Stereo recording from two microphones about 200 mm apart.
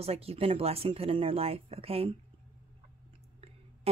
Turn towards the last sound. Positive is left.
turn(degrees=-30)  # may be behind; listen again after turning